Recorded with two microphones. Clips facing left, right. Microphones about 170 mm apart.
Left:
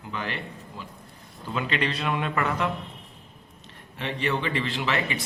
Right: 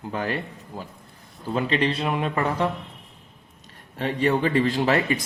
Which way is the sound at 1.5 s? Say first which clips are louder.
Right 5 dB; 30° right (ahead or behind).